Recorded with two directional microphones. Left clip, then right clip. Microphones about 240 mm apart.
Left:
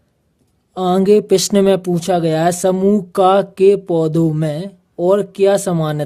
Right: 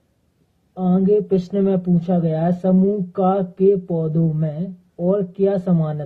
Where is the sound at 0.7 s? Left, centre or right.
Left.